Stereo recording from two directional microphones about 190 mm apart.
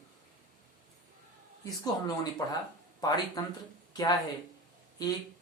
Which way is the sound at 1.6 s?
20° left (ahead or behind).